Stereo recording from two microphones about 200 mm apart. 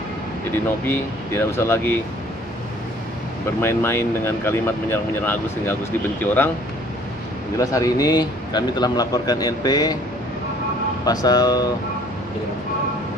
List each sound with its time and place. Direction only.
0.8 s speech: 10° left (ahead or behind)
3.6 s speech: 10° left (ahead or behind)
7.5 s speech: 15° left (ahead or behind)
11.1 s speech: 20° left (ahead or behind)